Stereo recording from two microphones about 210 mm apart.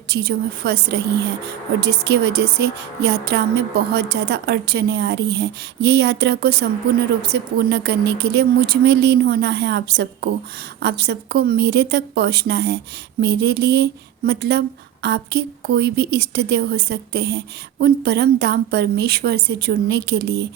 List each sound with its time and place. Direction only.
0.1 s a woman's voice: 50° right (ahead or behind)